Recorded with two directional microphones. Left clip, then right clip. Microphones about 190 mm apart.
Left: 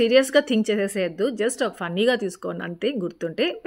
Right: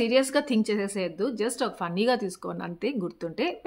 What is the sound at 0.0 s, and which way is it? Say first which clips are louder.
A woman's voice: left 6 dB; 15° left (ahead or behind).